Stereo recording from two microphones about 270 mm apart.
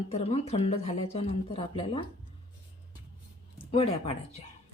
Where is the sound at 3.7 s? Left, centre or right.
Left.